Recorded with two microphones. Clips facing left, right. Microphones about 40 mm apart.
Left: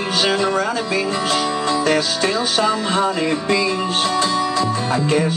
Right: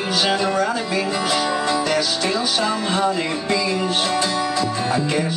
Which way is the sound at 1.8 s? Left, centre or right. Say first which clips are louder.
Left 3 dB; left.